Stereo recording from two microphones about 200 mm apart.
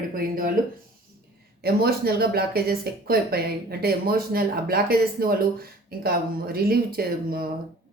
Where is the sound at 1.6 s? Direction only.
50° right (ahead or behind).